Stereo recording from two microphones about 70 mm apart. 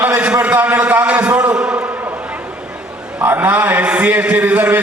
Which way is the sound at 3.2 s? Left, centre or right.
Right.